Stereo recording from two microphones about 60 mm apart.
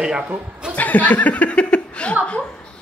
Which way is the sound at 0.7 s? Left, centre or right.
Left.